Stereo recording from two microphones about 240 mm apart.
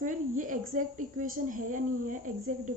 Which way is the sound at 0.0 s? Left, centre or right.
Right.